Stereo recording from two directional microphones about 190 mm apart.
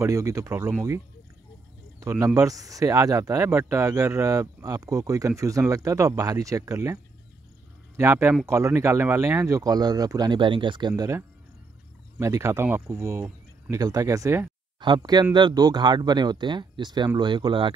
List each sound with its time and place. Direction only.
0.0 s speech: 15° right (ahead or behind)